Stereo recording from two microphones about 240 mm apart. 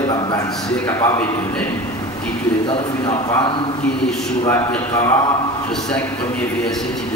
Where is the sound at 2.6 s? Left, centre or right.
Centre.